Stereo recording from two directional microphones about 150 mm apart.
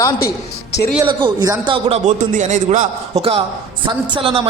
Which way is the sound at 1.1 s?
30° right (ahead or behind).